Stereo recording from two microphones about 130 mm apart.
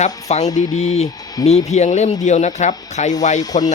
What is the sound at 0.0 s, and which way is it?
Speech, 60° left (ahead or behind).